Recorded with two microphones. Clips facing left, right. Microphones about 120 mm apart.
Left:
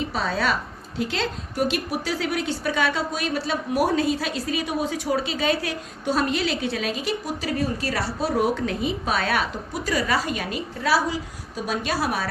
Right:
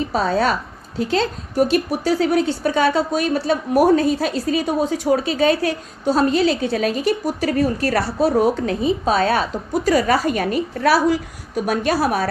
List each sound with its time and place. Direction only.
0.1 s a woman's voice: 40° right (ahead or behind)
8.2 s a woman's voice: 35° right (ahead or behind); by 11.9 s 60° right (ahead or behind)
11.9 s speech: 40° right (ahead or behind)